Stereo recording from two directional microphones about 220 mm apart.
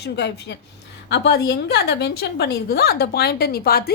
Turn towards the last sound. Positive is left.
turn(degrees=45)  # may be behind; listen again after turning